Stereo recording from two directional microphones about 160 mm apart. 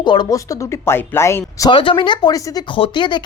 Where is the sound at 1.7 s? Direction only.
30° left (ahead or behind).